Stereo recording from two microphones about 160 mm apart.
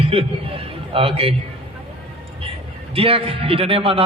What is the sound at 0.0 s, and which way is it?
A man's voice, 35° right (ahead or behind).